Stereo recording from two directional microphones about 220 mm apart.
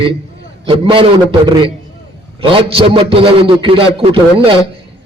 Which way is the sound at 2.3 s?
25° right (ahead or behind).